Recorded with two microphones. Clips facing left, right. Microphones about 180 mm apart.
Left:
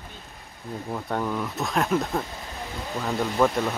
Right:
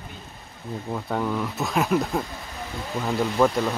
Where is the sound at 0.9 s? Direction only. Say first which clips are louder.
Right 2 dB; centre (ahead or behind).